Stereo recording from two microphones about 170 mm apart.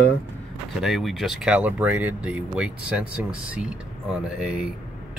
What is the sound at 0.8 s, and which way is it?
Speech, centre (ahead or behind).